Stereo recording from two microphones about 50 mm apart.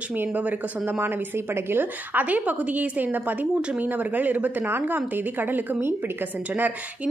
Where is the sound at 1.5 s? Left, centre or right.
Right.